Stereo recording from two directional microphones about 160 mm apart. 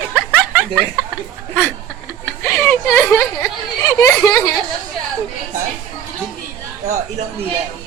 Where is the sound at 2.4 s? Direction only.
10° left (ahead or behind).